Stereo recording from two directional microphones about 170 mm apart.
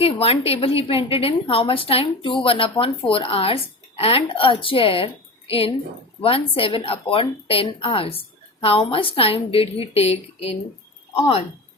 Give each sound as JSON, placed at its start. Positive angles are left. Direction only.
{"t": 0.0, "sound": "a woman's voice", "side_deg": 35}